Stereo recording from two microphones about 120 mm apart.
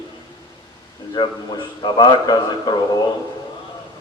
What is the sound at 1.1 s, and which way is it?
A man's voice, 40° left (ahead or behind).